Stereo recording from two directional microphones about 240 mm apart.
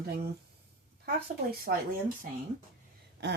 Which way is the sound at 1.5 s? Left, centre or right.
Right.